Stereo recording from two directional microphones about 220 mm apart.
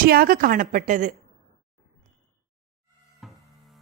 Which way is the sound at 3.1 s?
Centre (ahead or behind).